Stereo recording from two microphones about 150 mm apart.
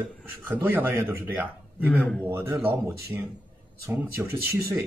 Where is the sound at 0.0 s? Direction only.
15° right (ahead or behind).